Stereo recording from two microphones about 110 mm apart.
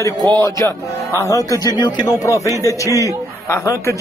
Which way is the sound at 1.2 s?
30° left (ahead or behind).